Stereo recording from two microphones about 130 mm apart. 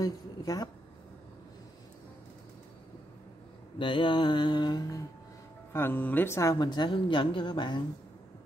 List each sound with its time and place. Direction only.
0.0 s a woman's voice: 30° left (ahead or behind)
3.7 s a woman's voice: 40° left (ahead or behind)
5.7 s speech: 15° left (ahead or behind)
6.5 s a woman's voice: 35° left (ahead or behind)